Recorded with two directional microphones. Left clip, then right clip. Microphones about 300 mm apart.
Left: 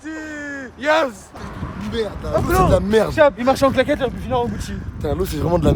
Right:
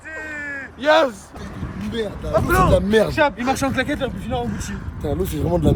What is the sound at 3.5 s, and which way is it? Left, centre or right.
Speech, left.